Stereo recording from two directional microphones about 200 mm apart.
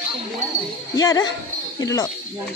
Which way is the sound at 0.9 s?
20° left (ahead or behind).